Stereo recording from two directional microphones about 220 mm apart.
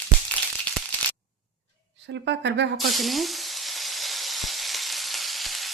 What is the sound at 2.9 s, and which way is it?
Sizzle, centre (ahead or behind).